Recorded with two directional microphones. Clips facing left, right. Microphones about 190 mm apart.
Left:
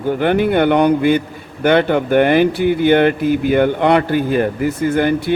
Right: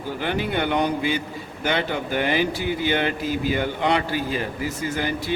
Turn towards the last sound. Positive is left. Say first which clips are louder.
# left 11 dB
turn(degrees=60)  # may be behind; listen again after turning